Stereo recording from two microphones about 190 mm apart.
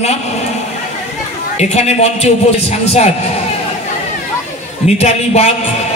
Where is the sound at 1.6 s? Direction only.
35° left (ahead or behind).